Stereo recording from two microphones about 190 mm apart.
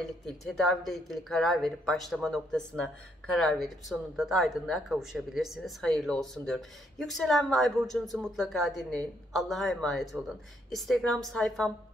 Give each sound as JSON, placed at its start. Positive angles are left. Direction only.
{"t": 0.0, "sound": "speech", "side_deg": 0}